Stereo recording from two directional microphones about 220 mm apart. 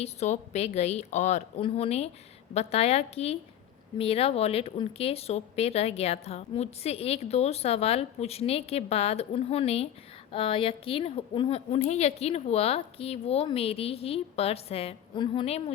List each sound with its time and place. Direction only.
0.0 s a woman's voice: 30° left (ahead or behind)